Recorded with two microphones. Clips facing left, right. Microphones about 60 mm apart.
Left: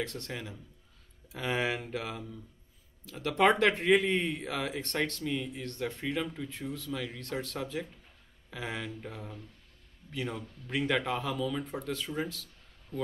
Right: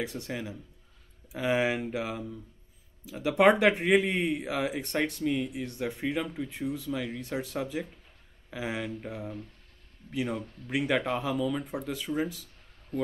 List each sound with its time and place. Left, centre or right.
0.0 s speech: centre
12.9 s speech: right